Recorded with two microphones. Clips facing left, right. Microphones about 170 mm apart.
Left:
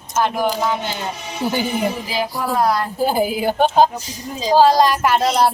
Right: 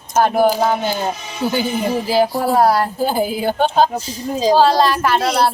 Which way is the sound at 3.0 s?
10° left (ahead or behind).